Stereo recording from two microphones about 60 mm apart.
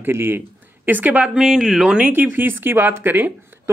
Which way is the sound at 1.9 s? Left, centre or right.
Right.